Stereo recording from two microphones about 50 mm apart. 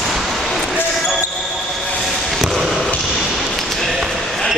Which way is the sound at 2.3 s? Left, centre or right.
Centre.